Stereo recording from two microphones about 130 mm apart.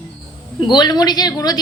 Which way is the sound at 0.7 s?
35° left (ahead or behind).